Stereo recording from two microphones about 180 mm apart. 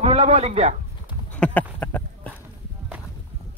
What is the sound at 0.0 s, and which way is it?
Speech, 35° right (ahead or behind).